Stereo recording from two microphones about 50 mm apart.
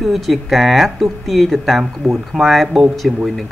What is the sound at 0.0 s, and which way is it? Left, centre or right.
Speech, centre.